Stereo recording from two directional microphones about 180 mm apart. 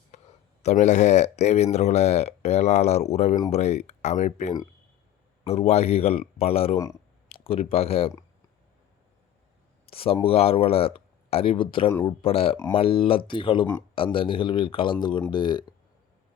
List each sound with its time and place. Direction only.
0.6 s speech: 40° left (ahead or behind)
9.8 s a man's voice: 30° left (ahead or behind)